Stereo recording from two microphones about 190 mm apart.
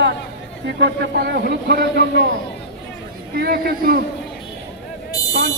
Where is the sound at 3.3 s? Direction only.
55° right (ahead or behind).